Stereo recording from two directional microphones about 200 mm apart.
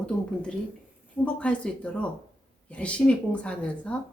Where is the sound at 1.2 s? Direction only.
5° left (ahead or behind).